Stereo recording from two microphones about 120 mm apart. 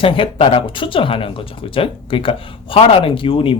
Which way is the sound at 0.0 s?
50° left (ahead or behind).